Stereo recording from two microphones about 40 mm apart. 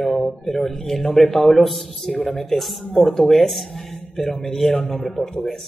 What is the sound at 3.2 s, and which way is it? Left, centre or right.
A man's voice, centre.